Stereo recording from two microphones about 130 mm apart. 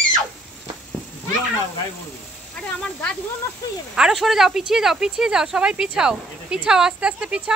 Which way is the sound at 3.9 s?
5° right (ahead or behind).